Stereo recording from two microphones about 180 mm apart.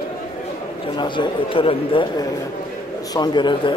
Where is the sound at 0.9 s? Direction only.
25° left (ahead or behind).